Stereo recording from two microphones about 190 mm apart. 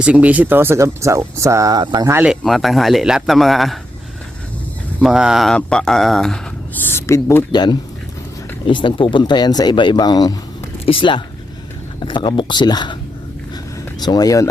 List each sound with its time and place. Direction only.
0.0 s speech: 5° right (ahead or behind)
4.9 s speech: 5° right (ahead or behind)
6.8 s speech: 15° left (ahead or behind)
14.0 s speech: 20° left (ahead or behind)